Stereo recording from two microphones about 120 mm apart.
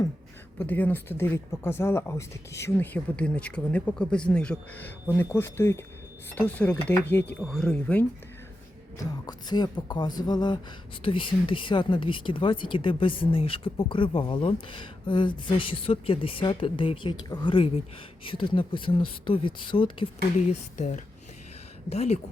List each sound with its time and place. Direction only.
0.6 s speech: 15° left (ahead or behind)
2.7 s speech: 15° left (ahead or behind)
5.1 s speech: 20° left (ahead or behind)
7.3 s speech: centre (ahead or behind)
9.2 s speech: 35° left (ahead or behind)
20.5 s speech: 80° left
21.8 s speech: 65° left (ahead or behind)